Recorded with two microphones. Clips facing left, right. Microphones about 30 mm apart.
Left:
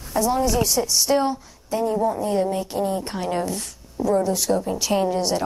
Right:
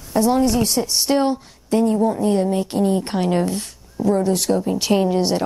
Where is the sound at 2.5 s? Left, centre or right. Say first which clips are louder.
Right 5 dB; right.